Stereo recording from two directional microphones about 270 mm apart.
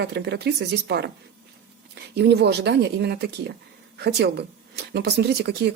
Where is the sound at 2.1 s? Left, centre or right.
Right.